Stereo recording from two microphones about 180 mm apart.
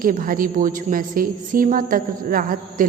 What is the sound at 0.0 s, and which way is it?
A woman's voice, 50° right (ahead or behind).